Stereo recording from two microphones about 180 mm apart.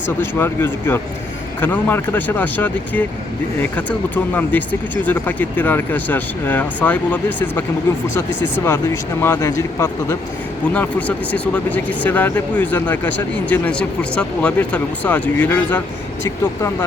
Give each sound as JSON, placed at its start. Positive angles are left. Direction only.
{"t": 0.2, "sound": "speech", "side_deg": 10}